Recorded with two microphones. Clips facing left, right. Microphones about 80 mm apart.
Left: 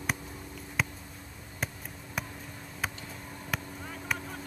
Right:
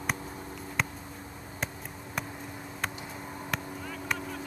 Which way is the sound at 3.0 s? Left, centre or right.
Right.